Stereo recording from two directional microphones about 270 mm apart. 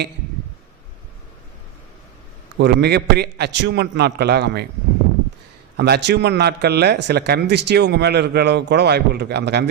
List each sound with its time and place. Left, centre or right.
2.6 s a man's voice: right
5.7 s a man's voice: right